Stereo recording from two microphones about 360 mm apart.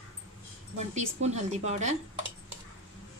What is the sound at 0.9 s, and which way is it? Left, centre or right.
A woman's voice, centre.